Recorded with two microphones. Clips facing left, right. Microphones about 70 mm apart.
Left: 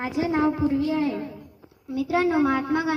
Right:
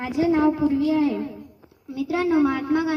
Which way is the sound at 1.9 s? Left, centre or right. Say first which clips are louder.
Right 1 dB; centre.